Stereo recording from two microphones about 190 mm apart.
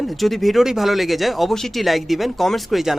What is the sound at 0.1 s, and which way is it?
Speech, centre (ahead or behind).